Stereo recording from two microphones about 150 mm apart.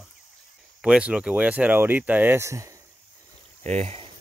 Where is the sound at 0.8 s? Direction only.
5° right (ahead or behind).